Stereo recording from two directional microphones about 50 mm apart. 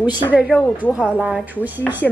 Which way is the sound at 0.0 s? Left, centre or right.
Right.